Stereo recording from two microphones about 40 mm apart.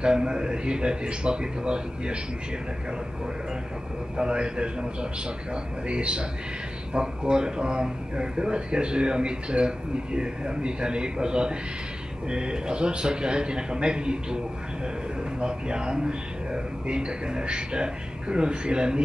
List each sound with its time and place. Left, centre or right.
0.0 s speech: right
4.2 s speech: right
5.9 s speech: right
15.4 s speech: right